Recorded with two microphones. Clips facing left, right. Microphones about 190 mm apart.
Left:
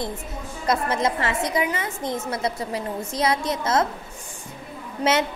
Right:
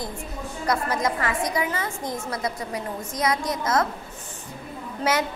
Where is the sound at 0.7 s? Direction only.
25° left (ahead or behind).